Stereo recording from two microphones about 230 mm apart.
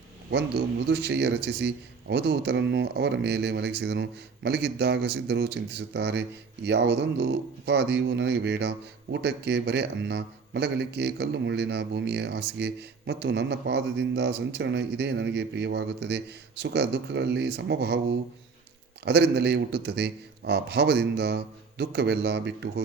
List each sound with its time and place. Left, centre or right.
0.3 s speech: right
19.0 s speech: right